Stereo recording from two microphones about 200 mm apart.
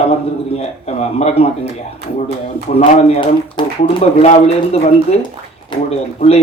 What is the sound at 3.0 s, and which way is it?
Speech, 25° left (ahead or behind).